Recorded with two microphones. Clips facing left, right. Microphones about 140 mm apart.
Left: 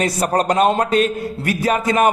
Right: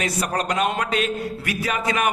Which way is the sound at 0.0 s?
35° left (ahead or behind).